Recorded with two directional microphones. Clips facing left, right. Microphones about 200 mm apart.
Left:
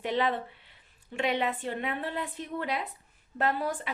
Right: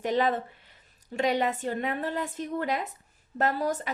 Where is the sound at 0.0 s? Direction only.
45° right (ahead or behind).